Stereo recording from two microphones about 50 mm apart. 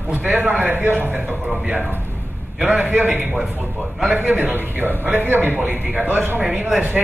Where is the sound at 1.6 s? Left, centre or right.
Centre.